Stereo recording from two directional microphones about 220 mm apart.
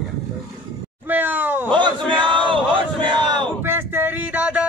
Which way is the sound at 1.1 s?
10° right (ahead or behind).